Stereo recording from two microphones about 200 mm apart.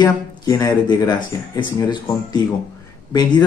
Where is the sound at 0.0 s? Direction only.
20° left (ahead or behind).